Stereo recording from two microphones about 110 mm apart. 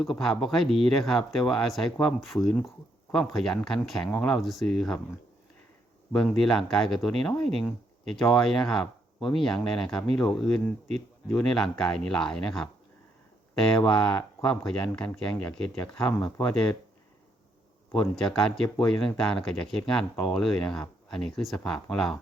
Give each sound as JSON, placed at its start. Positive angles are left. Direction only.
{"t": 0.0, "sound": "speech", "side_deg": 0}
{"t": 4.4, "sound": "speech", "side_deg": 0}
{"t": 6.1, "sound": "speech", "side_deg": 5}
{"t": 16.0, "sound": "speech", "side_deg": 45}
{"t": 16.5, "sound": "speech", "side_deg": 5}
{"t": 17.9, "sound": "speech", "side_deg": 5}